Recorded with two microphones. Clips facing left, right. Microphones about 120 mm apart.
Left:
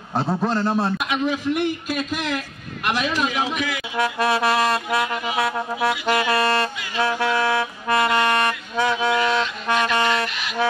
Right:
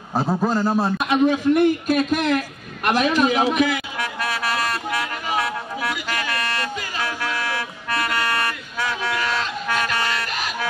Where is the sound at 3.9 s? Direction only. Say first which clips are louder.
Left 6 dB; 30° left (ahead or behind).